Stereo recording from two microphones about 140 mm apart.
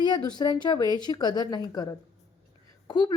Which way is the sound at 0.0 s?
30° left (ahead or behind).